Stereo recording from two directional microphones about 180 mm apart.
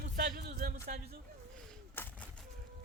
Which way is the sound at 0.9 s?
45° right (ahead or behind).